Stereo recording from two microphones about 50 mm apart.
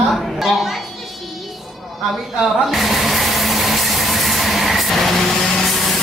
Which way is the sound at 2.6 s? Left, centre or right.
Centre.